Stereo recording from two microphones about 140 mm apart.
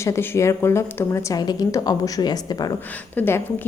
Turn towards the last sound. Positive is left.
turn(degrees=15)  # may be behind; listen again after turning